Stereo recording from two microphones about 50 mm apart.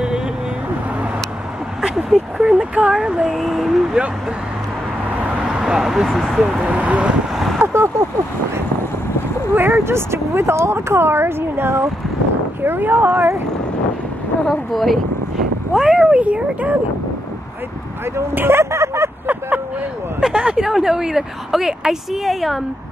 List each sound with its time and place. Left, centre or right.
1.8 s vehicle: centre
2.3 s speech: right
3.3 s a woman's voice: centre
5.4 s a sound: centre
6.0 s a woman's voice: centre
6.6 s speech: right
7.5 s a sound: right
9.6 s speech: right
14.5 s a woman's voice: centre
15.7 s speech: centre
16.2 s speech: right
18.3 s speech: right
18.6 s a sound: right
20.2 s a woman's voice: centre